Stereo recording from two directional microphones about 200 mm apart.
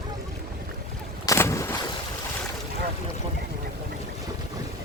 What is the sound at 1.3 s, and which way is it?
Vehicle, 15° left (ahead or behind).